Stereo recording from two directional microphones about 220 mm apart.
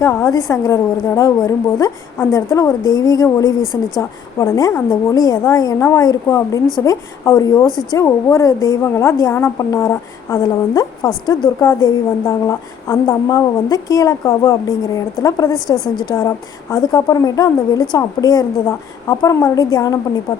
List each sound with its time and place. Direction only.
0.0 s a woman's voice: 10° left (ahead or behind)